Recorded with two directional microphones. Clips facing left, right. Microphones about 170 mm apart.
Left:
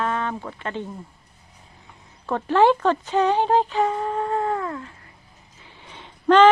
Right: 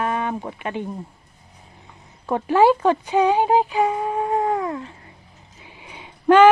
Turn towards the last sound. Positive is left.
turn(degrees=-10)  # may be behind; listen again after turning